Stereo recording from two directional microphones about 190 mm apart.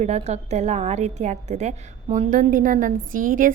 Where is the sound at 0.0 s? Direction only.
35° right (ahead or behind).